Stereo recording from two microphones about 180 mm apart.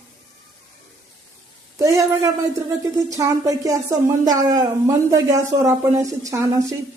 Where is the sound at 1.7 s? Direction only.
15° right (ahead or behind).